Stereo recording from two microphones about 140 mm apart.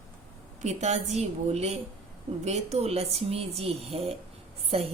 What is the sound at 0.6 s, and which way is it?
Speech, 55° right (ahead or behind).